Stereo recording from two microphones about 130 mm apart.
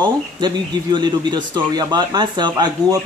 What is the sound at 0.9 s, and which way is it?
A man's voice, 35° right (ahead or behind).